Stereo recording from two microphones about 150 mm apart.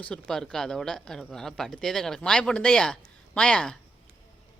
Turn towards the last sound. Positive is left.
turn(degrees=5)  # may be behind; listen again after turning